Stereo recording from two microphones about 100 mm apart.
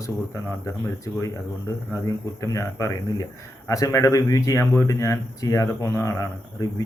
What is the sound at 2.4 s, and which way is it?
Speech, 30° left (ahead or behind).